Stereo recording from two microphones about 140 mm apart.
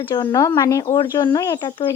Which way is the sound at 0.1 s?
30° left (ahead or behind).